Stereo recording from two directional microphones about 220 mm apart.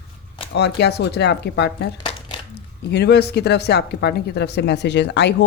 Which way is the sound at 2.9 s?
50° left (ahead or behind).